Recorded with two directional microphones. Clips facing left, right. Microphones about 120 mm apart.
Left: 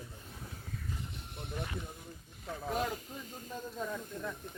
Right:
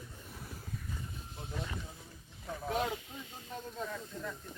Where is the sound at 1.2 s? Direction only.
65° left (ahead or behind).